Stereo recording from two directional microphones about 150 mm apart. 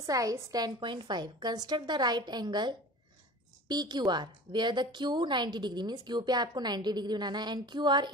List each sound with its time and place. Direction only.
0.0 s a woman's voice: 20° right (ahead or behind)